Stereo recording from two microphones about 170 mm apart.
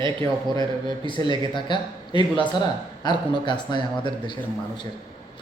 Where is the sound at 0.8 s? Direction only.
25° left (ahead or behind).